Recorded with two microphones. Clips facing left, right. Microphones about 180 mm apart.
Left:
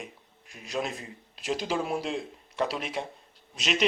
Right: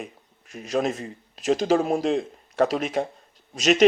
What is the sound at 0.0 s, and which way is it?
Speech, 45° right (ahead or behind).